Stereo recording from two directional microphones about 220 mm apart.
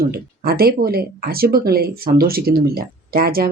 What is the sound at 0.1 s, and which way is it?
Speech, 45° right (ahead or behind).